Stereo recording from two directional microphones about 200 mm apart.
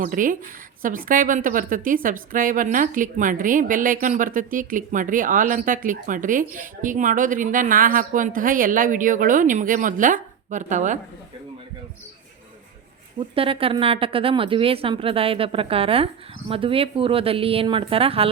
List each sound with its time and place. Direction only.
0.0 s a woman's voice: 40° right (ahead or behind)
13.1 s a woman's voice: 25° right (ahead or behind)